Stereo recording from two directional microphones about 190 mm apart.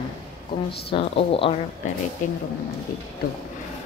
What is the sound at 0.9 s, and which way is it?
Speech, 30° left (ahead or behind).